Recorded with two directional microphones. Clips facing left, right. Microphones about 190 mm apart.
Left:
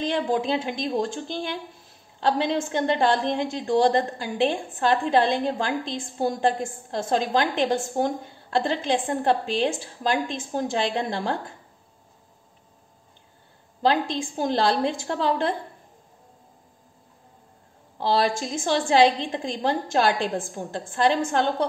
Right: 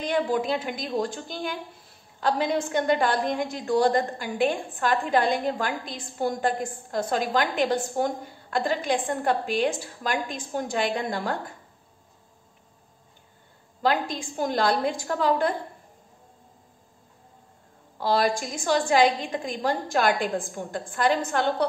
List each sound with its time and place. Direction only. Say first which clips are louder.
0.1 s a woman's voice: right 2 dB; 25° left (ahead or behind)
13.8 s a woman's voice: left 2 dB; 25° left (ahead or behind)
17.9 s a woman's voice: left 1 dB; 25° left (ahead or behind)